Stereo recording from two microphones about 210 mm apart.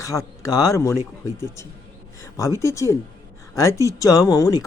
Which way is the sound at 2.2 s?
15° left (ahead or behind).